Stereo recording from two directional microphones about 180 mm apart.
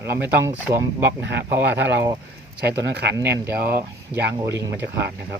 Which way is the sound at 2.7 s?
70° right (ahead or behind).